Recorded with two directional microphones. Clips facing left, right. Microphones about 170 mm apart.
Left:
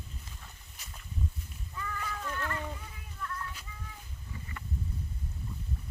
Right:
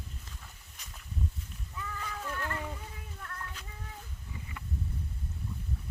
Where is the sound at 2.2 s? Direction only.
10° right (ahead or behind).